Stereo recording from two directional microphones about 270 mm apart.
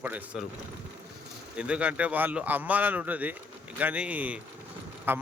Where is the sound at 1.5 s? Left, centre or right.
Centre.